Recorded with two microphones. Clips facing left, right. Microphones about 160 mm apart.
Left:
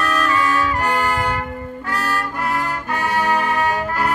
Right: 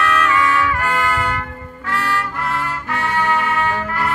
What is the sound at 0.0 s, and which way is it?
Brass instrument, 30° left (ahead or behind).